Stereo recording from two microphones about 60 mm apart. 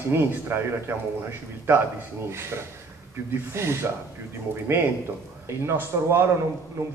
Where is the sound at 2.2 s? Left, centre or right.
Right.